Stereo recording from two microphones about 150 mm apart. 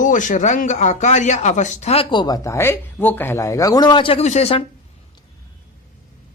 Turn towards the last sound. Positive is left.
turn(degrees=40)  # may be behind; listen again after turning